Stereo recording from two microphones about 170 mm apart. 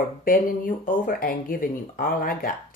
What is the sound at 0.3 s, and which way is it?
Speech, 55° left (ahead or behind).